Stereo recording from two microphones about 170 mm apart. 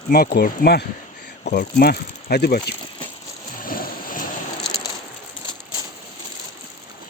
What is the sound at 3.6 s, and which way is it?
Music, 55° left (ahead or behind).